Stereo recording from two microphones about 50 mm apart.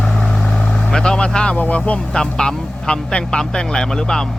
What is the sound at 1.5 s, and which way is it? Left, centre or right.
Speech, left.